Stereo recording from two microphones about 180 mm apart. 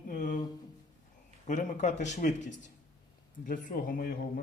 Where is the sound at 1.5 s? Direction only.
45° left (ahead or behind).